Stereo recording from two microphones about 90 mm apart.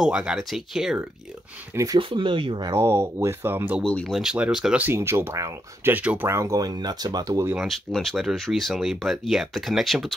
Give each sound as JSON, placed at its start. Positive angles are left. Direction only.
{"t": 0.0, "sound": "speech", "side_deg": -10}
{"t": 2.0, "sound": "speech", "side_deg": -70}
{"t": 2.7, "sound": "speech", "side_deg": -25}
{"t": 3.8, "sound": "speech", "side_deg": 5}
{"t": 4.2, "sound": "speech", "side_deg": -5}
{"t": 4.8, "sound": "speech", "side_deg": -30}
{"t": 7.5, "sound": "speech", "side_deg": 0}